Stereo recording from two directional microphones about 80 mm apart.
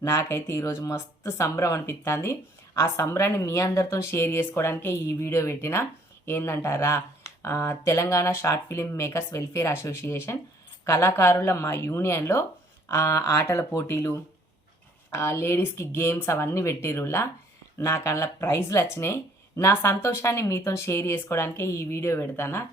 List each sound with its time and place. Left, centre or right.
0.0 s speech: left
15.1 s speech: left